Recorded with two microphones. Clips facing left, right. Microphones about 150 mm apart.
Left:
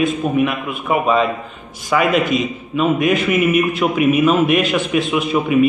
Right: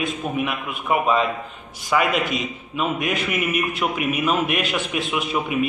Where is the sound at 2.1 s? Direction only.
50° left (ahead or behind).